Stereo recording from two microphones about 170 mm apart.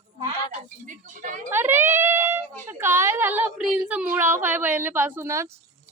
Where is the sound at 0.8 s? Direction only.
50° right (ahead or behind).